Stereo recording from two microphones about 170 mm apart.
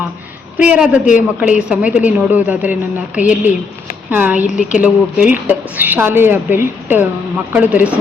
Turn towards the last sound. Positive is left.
turn(degrees=-10)  # may be behind; listen again after turning